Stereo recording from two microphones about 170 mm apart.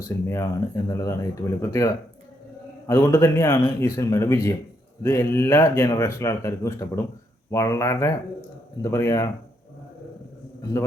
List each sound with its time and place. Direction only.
0.0 s speech: 15° left (ahead or behind)